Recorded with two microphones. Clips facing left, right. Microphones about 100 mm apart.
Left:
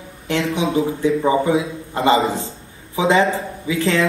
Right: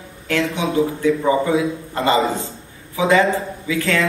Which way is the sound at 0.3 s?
30° left (ahead or behind).